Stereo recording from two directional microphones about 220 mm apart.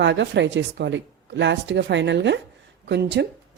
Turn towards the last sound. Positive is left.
turn(degrees=-50)  # may be behind; listen again after turning